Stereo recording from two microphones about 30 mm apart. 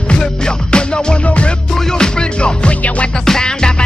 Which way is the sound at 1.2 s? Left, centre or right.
Left.